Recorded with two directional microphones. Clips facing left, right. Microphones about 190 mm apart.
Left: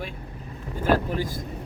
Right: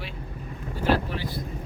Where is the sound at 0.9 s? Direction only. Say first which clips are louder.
Left 3 dB; 45° left (ahead or behind).